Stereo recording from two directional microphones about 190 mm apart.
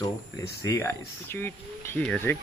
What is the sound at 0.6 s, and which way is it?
Speech, 15° left (ahead or behind).